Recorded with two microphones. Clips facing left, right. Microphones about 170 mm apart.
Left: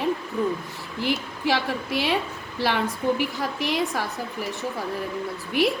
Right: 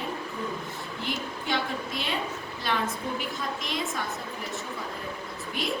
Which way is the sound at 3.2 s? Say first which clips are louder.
Left 7 dB; 70° left (ahead or behind).